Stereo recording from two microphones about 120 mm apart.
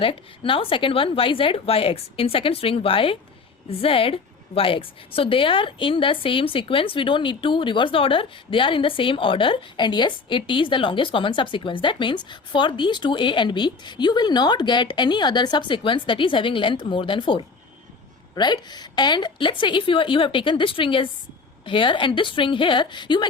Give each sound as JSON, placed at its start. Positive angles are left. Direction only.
{"t": 0.0, "sound": "a woman's voice", "side_deg": 45}